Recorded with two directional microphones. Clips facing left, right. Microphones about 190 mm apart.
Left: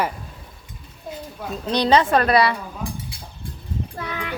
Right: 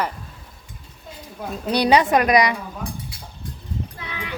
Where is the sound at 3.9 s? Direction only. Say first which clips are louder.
Left 3 dB; 45° left (ahead or behind).